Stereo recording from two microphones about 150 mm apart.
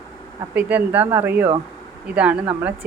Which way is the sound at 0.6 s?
10° right (ahead or behind).